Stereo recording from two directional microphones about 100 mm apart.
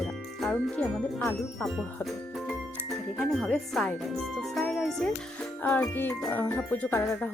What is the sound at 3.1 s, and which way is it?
Music, 5° left (ahead or behind).